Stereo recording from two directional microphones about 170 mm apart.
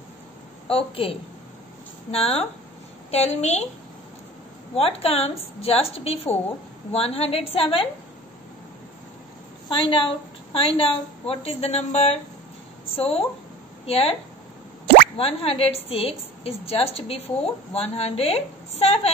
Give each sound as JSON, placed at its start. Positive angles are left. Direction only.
{"t": 0.7, "sound": "a woman's voice", "side_deg": 35}
{"t": 4.7, "sound": "a woman's voice", "side_deg": 35}
{"t": 9.7, "sound": "a woman's voice", "side_deg": 30}
{"t": 15.1, "sound": "a woman's voice", "side_deg": 35}